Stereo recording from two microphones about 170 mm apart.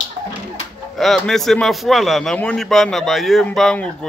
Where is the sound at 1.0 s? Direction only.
Centre (ahead or behind).